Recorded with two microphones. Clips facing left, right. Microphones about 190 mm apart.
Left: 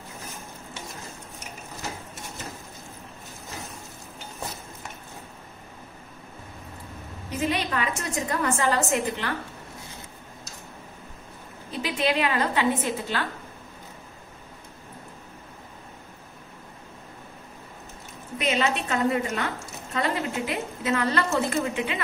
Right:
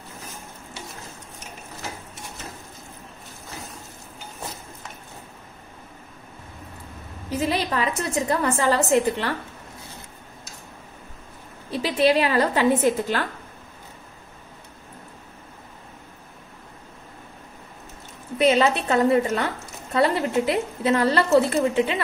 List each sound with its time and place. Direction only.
7.2 s a woman's voice: 35° right (ahead or behind)
11.8 s a woman's voice: 35° right (ahead or behind)
18.4 s a woman's voice: 35° right (ahead or behind)